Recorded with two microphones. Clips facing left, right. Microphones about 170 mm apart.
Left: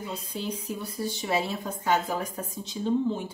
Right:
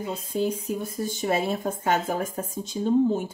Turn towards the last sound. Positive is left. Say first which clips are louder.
# right 5 dB
turn(degrees=-45)  # may be behind; listen again after turning